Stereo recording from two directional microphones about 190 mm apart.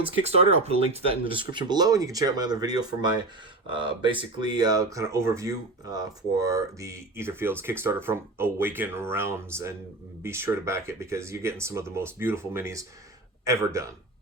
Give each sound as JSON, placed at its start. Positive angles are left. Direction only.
{"t": 0.6, "sound": "a man's voice", "side_deg": -30}